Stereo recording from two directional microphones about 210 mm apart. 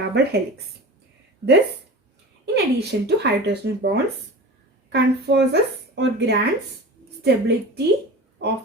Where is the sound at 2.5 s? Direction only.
50° right (ahead or behind).